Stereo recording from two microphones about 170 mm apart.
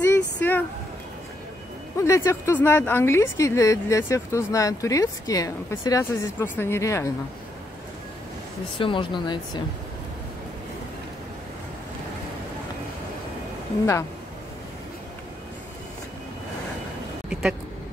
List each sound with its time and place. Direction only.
0.0 s a sound: 10° left (ahead or behind)
2.0 s speech: 15° left (ahead or behind)
8.7 s speech: 30° left (ahead or behind)
17.3 s speech: 5° right (ahead or behind)